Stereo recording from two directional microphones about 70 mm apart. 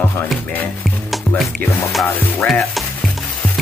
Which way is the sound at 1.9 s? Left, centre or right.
Centre.